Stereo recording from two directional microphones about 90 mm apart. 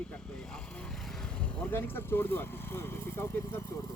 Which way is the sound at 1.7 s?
25° left (ahead or behind).